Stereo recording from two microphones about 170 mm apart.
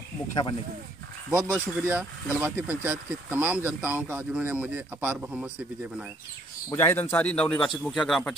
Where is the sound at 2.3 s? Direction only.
10° right (ahead or behind).